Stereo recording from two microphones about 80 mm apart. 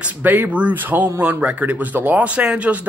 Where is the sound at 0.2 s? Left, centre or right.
Right.